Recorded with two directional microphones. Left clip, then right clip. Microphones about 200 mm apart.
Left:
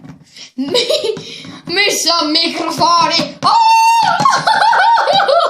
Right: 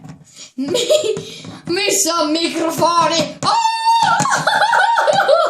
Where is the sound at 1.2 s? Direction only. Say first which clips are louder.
Even; 25° left (ahead or behind).